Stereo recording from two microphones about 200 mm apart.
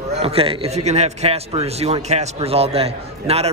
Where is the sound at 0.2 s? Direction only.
30° right (ahead or behind).